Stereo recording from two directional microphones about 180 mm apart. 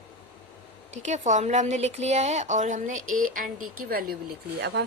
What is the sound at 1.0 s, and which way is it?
A woman's voice, 40° right (ahead or behind).